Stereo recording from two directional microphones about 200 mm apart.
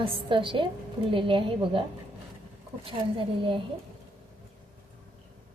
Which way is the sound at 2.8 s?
25° right (ahead or behind).